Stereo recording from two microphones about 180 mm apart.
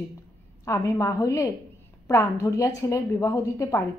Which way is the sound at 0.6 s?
15° left (ahead or behind).